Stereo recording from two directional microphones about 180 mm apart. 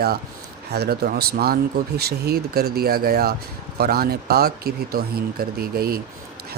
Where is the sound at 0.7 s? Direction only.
60° right (ahead or behind).